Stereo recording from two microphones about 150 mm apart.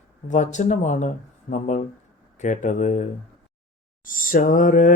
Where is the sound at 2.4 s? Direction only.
55° left (ahead or behind).